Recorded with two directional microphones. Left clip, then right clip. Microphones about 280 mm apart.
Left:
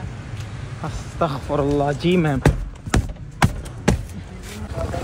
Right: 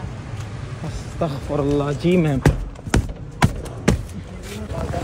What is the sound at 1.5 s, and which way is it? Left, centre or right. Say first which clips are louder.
Speech: left 1 dB; left.